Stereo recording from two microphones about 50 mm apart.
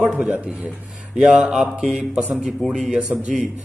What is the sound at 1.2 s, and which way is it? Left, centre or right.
A man's voice, centre.